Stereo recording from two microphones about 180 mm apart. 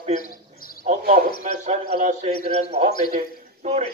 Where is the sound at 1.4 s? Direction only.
40° right (ahead or behind).